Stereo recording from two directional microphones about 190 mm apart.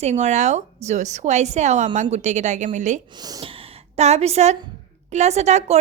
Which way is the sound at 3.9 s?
35° right (ahead or behind).